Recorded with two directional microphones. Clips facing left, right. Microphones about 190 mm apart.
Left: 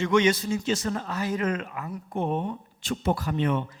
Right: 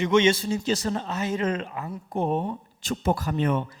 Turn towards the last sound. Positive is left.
turn(degrees=-45)  # may be behind; listen again after turning